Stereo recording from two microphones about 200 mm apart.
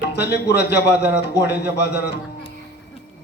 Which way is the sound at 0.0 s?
55° left (ahead or behind).